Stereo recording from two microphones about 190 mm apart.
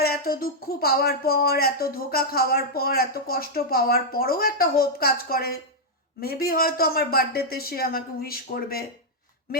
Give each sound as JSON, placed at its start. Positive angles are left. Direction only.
{"t": 0.0, "sound": "speech", "side_deg": 50}